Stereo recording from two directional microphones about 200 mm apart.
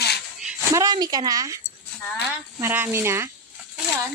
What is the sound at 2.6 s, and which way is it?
Speech, 10° right (ahead or behind).